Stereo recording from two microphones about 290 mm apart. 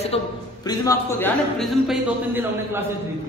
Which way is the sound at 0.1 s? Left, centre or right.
Centre.